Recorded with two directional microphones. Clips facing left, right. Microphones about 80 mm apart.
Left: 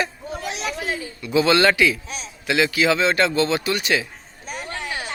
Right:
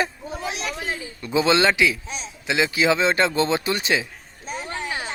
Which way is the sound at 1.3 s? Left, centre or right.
Right.